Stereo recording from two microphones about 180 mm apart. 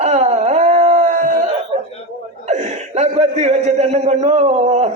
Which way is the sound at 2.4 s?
40° right (ahead or behind).